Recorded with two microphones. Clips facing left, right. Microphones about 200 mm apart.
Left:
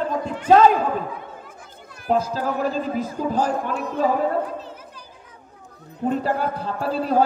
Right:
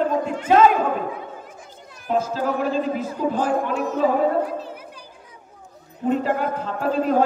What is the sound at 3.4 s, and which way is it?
Speech, 45° right (ahead or behind).